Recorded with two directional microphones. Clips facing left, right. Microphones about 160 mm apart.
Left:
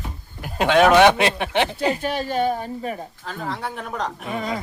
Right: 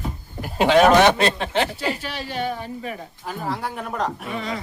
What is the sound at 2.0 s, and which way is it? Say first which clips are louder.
A woman's voice: left 6 dB; 50° left (ahead or behind).